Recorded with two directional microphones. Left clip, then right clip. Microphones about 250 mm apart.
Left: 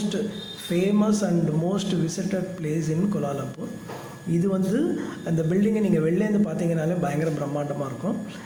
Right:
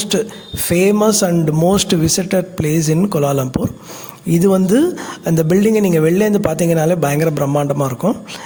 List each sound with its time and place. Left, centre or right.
0.1 s speech: right